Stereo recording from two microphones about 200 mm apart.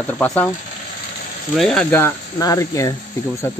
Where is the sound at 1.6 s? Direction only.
5° left (ahead or behind).